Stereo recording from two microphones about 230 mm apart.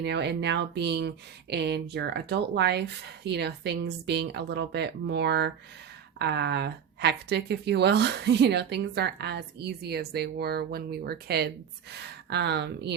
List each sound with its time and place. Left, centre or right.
0.0 s a woman's voice: right